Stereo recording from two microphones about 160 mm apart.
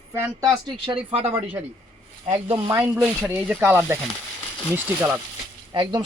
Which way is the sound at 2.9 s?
5° right (ahead or behind).